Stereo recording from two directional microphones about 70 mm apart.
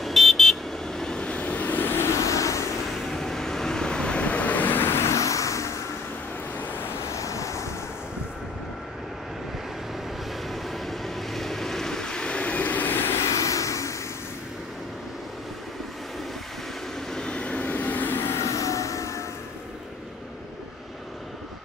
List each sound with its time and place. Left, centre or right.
0.0 s vehicle: centre; by 2.6 s left
3.1 s vehicle: centre; by 5.8 s left
7.1 s waves: left
10.5 s vehicle: centre; by 13.2 s left
13.3 s vehicle: left
17.1 s vehicle: centre; by 19.2 s left